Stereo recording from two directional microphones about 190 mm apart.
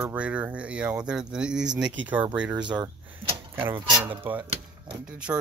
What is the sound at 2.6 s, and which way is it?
Speech, 25° right (ahead or behind).